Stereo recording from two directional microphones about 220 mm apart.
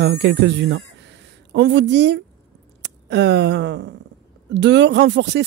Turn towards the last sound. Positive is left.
turn(degrees=-50)  # may be behind; listen again after turning